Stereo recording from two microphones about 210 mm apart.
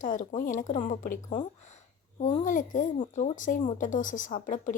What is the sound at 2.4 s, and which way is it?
A woman's voice, 40° left (ahead or behind).